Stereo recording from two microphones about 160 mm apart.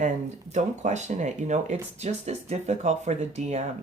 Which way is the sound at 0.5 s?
45° right (ahead or behind).